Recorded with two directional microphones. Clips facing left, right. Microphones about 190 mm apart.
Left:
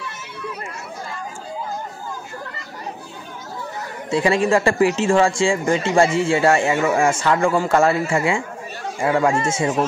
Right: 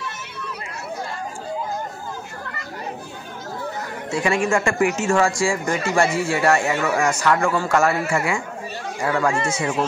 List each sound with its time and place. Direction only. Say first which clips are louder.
4.1 s speech: left 3 dB; 30° left (ahead or behind)